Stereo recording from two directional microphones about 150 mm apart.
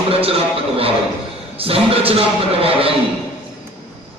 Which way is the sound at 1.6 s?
40° right (ahead or behind).